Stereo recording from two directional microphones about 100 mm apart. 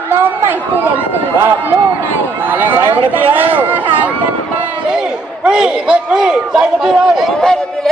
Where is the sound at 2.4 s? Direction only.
20° right (ahead or behind).